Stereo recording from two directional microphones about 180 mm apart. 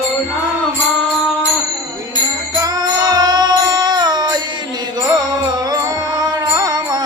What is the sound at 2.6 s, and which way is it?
Music, 20° right (ahead or behind).